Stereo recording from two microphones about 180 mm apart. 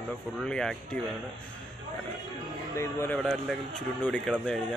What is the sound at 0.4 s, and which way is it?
Speech, 5° left (ahead or behind).